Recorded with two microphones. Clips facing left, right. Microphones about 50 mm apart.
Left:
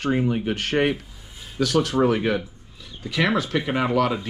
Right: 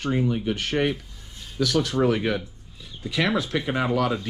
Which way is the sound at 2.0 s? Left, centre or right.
Left.